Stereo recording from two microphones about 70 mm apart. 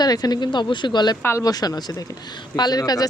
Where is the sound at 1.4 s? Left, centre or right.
Left.